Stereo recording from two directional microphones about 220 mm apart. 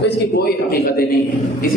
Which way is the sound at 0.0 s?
45° left (ahead or behind).